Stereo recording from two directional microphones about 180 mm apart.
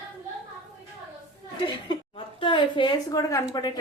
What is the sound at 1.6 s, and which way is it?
A woman's voice, 25° left (ahead or behind).